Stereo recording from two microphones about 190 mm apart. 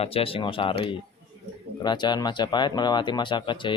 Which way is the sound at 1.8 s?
25° left (ahead or behind).